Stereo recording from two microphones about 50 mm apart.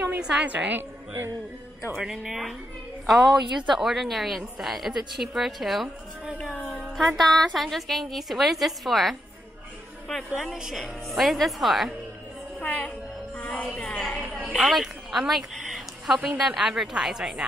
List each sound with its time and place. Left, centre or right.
0.2 s a woman's voice: right
0.7 s a woman's voice: right
2.0 s a woman's voice: centre
7.0 s a woman's voice: centre
12.5 s a woman's voice: left
13.4 s music: left
13.7 s a woman's voice: centre
14.5 s a woman's voice: centre
15.6 s a sound: centre
16.3 s a woman's voice: centre